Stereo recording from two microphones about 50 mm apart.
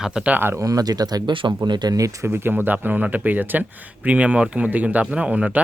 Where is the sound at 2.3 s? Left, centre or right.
Right.